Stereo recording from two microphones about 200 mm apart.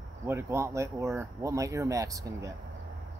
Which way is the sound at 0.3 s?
15° right (ahead or behind).